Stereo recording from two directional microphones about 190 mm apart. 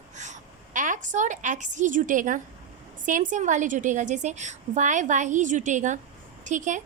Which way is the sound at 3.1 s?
45° right (ahead or behind).